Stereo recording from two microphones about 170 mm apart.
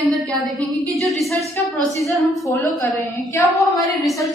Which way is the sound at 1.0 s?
Centre (ahead or behind).